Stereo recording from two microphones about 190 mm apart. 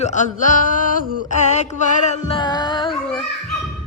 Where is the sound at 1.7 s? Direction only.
40° left (ahead or behind); by 2.9 s 25° left (ahead or behind).